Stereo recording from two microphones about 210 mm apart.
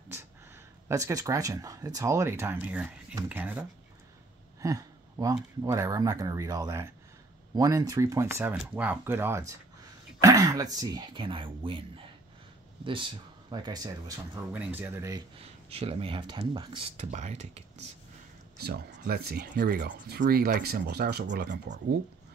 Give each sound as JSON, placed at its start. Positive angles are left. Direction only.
{"t": 0.8, "sound": "speech", "side_deg": -15}
{"t": 12.8, "sound": "speech", "side_deg": -25}
{"t": 15.3, "sound": "speech", "side_deg": -30}
{"t": 18.6, "sound": "speech", "side_deg": -50}